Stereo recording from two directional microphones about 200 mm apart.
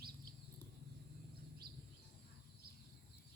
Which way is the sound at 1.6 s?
50° right (ahead or behind).